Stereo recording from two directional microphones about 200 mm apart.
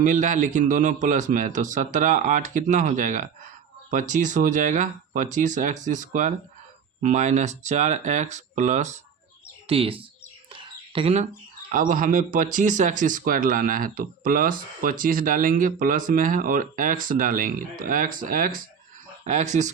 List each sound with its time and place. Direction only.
0.0 s a man's voice: 40° right (ahead or behind)
10.5 s a sound: 25° right (ahead or behind)
11.7 s a man's voice: 40° right (ahead or behind)